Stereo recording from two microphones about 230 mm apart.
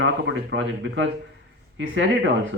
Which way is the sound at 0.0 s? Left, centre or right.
Right.